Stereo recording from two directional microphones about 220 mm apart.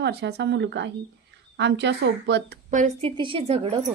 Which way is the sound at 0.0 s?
50° right (ahead or behind).